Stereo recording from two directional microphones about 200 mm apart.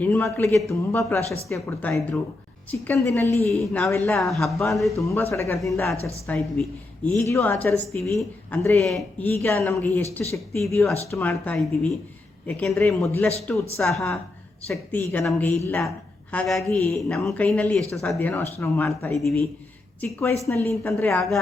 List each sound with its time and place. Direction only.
0.0 s a woman's voice: 5° left (ahead or behind)
4.2 s speech: centre (ahead or behind)
4.9 s a woman's voice: 15° left (ahead or behind)
9.3 s a woman's voice: 15° left (ahead or behind)